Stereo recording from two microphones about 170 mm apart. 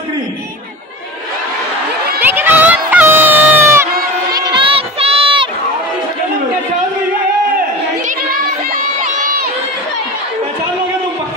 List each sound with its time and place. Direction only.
2.1 s a sound: 10° right (ahead or behind)
4.3 s crowd: 25° right (ahead or behind)
8.2 s crowd: 60° right (ahead or behind)